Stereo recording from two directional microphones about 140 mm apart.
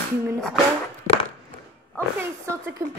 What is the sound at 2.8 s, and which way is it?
Speech, 20° right (ahead or behind).